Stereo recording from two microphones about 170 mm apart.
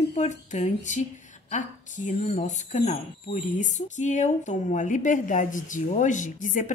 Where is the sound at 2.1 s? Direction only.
45° left (ahead or behind).